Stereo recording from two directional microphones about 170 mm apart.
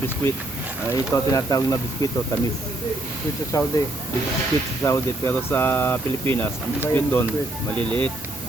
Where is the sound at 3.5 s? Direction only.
20° left (ahead or behind).